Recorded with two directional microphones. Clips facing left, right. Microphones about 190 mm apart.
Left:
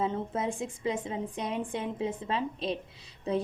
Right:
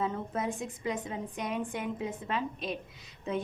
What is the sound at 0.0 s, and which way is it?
A woman's voice, 25° left (ahead or behind).